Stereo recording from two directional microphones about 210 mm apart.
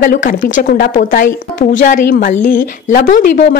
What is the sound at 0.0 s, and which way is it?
A woman's voice, 40° left (ahead or behind).